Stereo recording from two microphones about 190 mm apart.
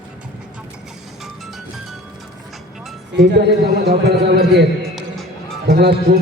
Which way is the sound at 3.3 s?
60° right (ahead or behind).